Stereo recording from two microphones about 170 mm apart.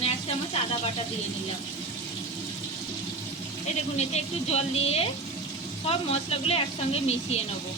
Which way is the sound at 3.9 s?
40° left (ahead or behind).